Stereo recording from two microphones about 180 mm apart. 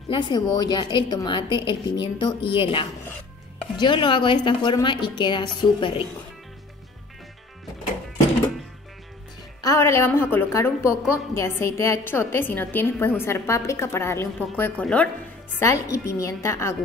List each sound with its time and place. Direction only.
0.1 s a woman's voice: 25° left (ahead or behind)
9.6 s a woman's voice: 15° left (ahead or behind)